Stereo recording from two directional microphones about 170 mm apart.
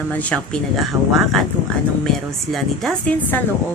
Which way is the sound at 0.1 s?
10° left (ahead or behind).